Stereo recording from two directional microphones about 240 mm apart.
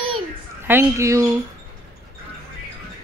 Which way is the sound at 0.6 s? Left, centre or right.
Centre.